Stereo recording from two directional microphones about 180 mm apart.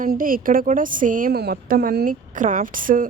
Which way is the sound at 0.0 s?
50° right (ahead or behind).